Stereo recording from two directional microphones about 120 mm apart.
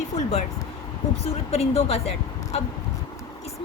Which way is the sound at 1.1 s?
60° left (ahead or behind).